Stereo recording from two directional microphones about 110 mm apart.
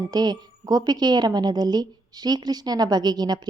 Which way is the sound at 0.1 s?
40° right (ahead or behind).